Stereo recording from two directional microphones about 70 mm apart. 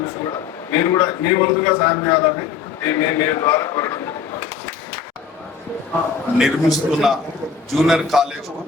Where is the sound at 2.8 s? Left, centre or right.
Left.